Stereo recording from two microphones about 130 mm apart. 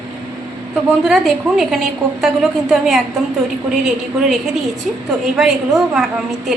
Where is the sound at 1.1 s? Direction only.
Centre (ahead or behind).